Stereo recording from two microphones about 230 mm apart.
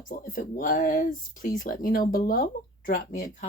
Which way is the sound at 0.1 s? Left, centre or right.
Left.